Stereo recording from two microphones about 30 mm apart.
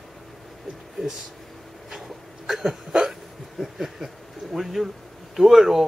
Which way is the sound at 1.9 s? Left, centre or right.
Centre.